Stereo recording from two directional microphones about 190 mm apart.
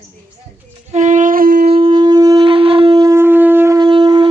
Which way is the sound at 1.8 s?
20° right (ahead or behind).